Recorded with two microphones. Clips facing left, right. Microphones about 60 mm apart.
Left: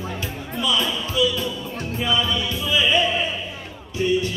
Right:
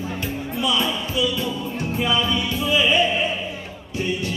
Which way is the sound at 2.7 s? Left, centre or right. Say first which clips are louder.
Right 1 dB; centre.